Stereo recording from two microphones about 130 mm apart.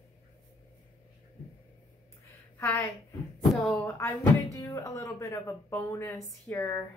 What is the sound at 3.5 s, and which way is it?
Speech, 10° left (ahead or behind).